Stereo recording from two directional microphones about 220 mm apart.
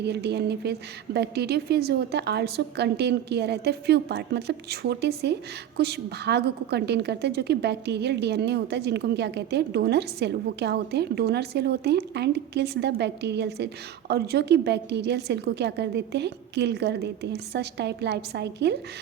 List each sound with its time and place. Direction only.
0.0 s a woman's voice: 50° right (ahead or behind)